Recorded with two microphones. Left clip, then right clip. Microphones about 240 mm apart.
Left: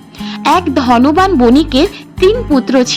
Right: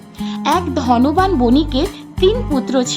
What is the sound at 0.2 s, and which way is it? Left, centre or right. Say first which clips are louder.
Speech: left 6 dB; centre.